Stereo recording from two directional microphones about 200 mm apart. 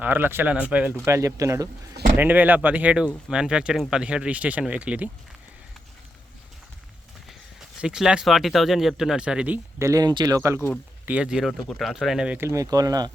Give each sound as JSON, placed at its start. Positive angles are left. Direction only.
{"t": 0.0, "sound": "speech", "side_deg": -10}
{"t": 7.8, "sound": "speech", "side_deg": -5}